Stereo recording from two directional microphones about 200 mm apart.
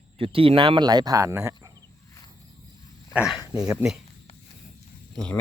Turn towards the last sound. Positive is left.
turn(degrees=5)  # may be behind; listen again after turning